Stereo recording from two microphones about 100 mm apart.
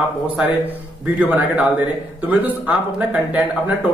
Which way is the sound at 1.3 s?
15° right (ahead or behind).